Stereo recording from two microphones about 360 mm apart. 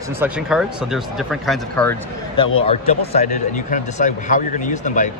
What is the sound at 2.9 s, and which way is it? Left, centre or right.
Speech, centre.